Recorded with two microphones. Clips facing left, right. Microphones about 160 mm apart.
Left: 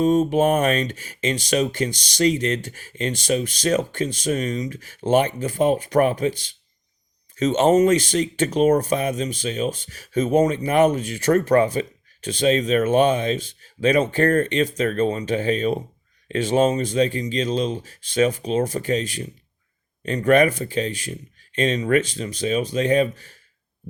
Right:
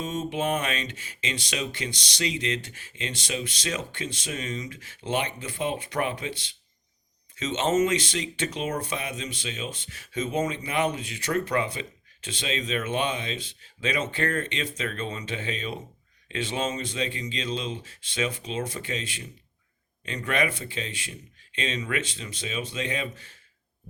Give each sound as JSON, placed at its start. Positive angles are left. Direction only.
{"t": 0.0, "sound": "speech", "side_deg": 40}